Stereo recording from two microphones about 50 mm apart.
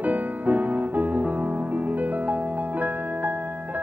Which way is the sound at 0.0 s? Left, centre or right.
Right.